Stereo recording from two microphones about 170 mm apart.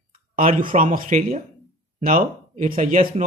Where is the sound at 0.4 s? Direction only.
50° right (ahead or behind).